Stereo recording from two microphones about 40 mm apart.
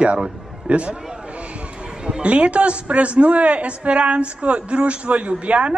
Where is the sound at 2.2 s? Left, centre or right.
Right.